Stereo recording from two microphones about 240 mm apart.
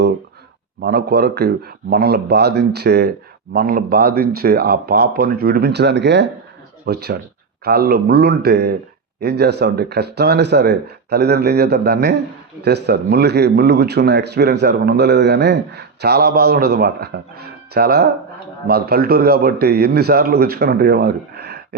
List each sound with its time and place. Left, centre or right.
0.8 s a man's voice: right